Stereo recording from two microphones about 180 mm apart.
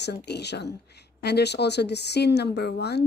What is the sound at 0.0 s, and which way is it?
Speech, 65° left (ahead or behind).